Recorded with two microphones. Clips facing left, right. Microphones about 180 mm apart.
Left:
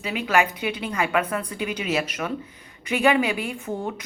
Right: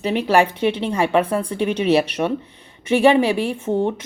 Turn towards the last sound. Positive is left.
turn(degrees=-25)  # may be behind; listen again after turning